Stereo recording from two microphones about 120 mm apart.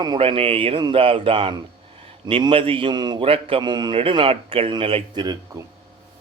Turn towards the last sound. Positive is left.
turn(degrees=-30)  # may be behind; listen again after turning